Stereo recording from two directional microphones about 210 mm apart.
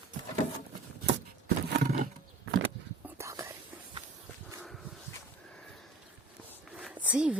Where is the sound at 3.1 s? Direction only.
15° right (ahead or behind).